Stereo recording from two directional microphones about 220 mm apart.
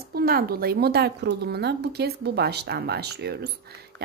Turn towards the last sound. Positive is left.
turn(degrees=-50)  # may be behind; listen again after turning